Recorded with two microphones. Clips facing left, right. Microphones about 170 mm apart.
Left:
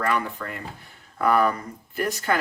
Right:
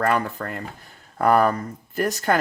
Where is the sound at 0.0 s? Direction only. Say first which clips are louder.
Right 3 dB; 45° right (ahead or behind).